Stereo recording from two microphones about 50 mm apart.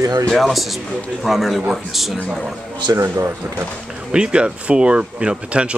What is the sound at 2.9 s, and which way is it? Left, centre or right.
Speech, right.